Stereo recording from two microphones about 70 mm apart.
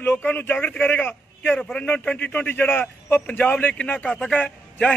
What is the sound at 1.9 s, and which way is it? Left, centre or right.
A man's voice, left.